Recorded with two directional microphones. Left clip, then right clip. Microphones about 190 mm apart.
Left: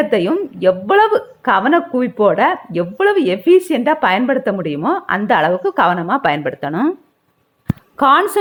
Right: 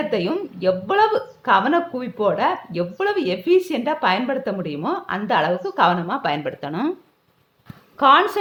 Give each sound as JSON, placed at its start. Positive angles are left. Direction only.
{"t": 0.1, "sound": "speech", "side_deg": 25}
{"t": 7.9, "sound": "speech", "side_deg": 30}